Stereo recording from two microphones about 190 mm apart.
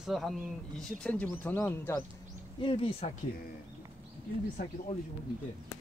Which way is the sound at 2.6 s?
30° left (ahead or behind).